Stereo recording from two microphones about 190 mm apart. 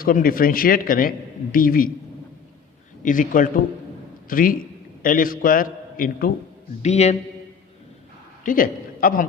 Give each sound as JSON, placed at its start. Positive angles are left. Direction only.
{"t": 0.0, "sound": "a man's voice", "side_deg": 50}
{"t": 3.0, "sound": "a man's voice", "side_deg": 45}
{"t": 6.8, "sound": "a man's voice", "side_deg": 35}
{"t": 8.4, "sound": "a man's voice", "side_deg": 45}